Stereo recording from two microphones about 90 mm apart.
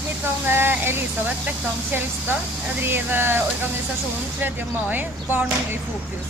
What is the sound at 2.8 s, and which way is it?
Speech, 25° right (ahead or behind).